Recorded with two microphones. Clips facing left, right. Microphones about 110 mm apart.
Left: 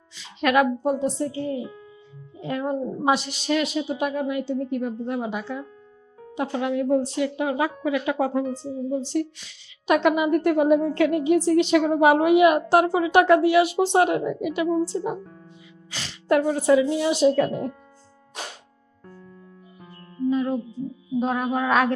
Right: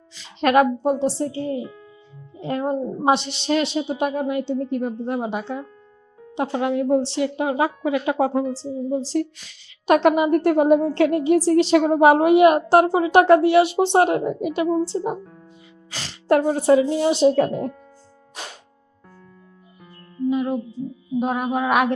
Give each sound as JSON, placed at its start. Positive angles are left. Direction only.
{"t": 0.3, "sound": "a woman's voice", "side_deg": -35}
{"t": 9.1, "sound": "a woman's voice", "side_deg": -45}
{"t": 15.9, "sound": "a woman's voice", "side_deg": -40}
{"t": 20.2, "sound": "music", "side_deg": -10}
{"t": 21.2, "sound": "a woman's voice", "side_deg": -10}